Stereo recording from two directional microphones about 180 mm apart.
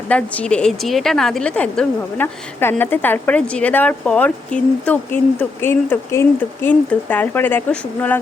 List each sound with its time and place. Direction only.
0.1 s a woman's voice: 5° left (ahead or behind)